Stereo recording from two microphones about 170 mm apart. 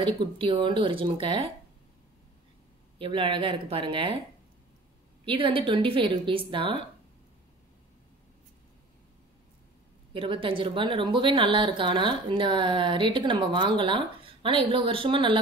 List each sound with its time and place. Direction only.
0.0 s a woman's voice: 30° right (ahead or behind)
3.0 s a woman's voice: 30° right (ahead or behind)
5.2 s a woman's voice: 30° right (ahead or behind)
10.1 s a woman's voice: 30° right (ahead or behind)